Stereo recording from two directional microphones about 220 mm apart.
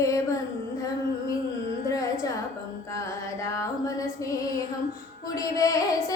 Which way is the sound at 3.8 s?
15° left (ahead or behind).